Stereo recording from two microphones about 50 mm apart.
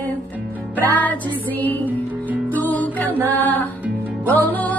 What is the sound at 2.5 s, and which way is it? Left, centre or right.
Music, left.